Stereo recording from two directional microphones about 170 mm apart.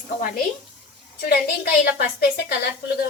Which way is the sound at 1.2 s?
60° left (ahead or behind).